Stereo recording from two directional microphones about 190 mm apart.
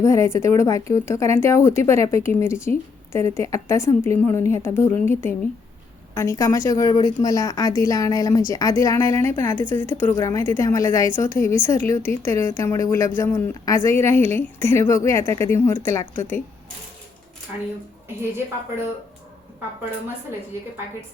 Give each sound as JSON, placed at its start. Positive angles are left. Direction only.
{"t": 0.0, "sound": "speech", "side_deg": 15}